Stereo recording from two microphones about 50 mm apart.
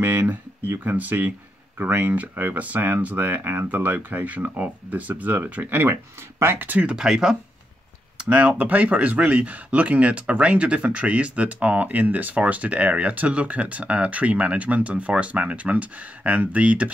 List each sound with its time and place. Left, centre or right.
0.0 s speech: right
6.4 s speech: right
6.9 s speech: centre
8.2 s speech: right